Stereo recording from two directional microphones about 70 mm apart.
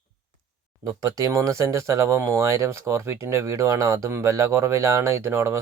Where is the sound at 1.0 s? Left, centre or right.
Right.